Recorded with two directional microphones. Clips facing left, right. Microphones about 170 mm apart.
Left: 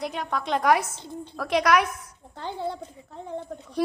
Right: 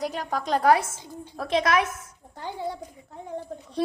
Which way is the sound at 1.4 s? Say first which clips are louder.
Left 1 dB; 25° right (ahead or behind).